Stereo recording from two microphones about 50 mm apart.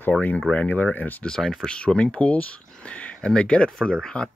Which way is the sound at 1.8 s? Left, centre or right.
Left.